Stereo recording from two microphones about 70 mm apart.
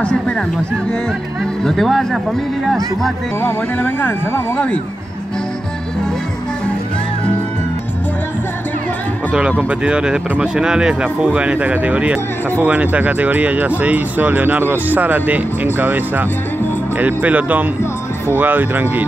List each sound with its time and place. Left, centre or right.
1.6 s speech: centre
3.4 s speech: left
9.3 s speech: centre